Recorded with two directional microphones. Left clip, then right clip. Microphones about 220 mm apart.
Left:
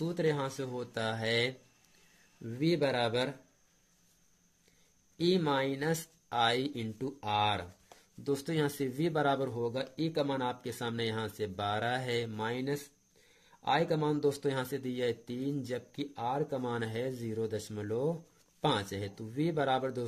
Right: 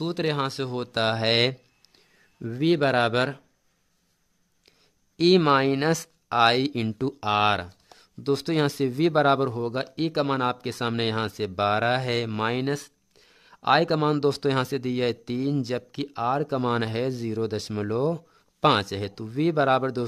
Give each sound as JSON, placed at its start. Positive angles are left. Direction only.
{"t": 0.0, "sound": "speech", "side_deg": -40}
{"t": 5.1, "sound": "speech", "side_deg": -45}